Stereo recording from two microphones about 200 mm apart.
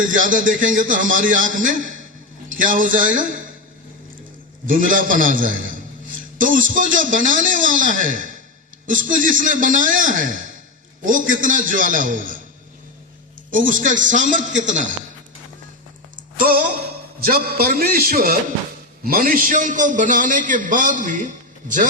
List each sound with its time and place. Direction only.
0.0 s a man's voice: 40° right (ahead or behind)
4.6 s a man's voice: 40° right (ahead or behind)
13.5 s a man's voice: 40° right (ahead or behind)
16.4 s a man's voice: 50° right (ahead or behind)